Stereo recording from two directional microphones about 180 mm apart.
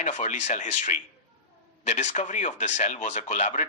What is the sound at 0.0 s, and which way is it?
Speech, 45° left (ahead or behind).